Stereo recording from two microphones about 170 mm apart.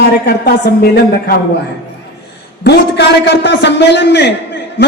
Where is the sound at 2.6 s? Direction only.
85° left.